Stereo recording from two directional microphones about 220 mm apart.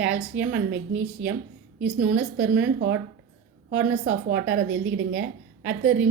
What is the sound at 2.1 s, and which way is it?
Speech, 5° right (ahead or behind).